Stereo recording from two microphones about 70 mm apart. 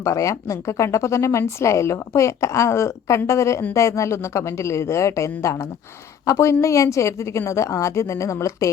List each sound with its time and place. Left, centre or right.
0.0 s speech: left